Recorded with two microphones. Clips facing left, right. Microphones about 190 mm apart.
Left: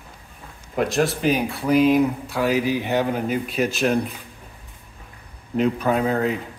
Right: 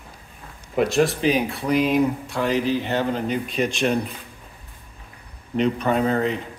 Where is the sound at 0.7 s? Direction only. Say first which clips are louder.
Right 2 dB; centre (ahead or behind).